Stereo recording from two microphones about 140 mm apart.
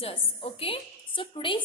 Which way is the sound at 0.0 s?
45° left (ahead or behind).